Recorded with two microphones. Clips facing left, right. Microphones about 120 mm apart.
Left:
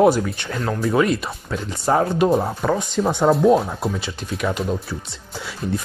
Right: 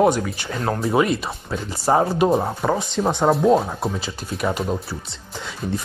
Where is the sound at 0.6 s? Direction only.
30° right (ahead or behind).